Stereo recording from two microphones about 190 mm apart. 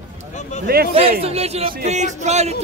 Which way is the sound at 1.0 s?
30° right (ahead or behind).